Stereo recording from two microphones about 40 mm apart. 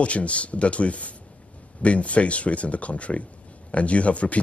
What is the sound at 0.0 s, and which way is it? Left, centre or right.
Speech, left.